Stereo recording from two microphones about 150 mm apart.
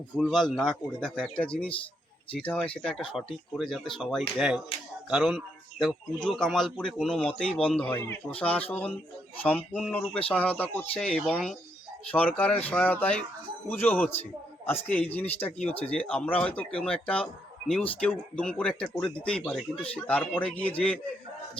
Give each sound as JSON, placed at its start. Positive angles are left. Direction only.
{"t": 0.2, "sound": "speech", "side_deg": 0}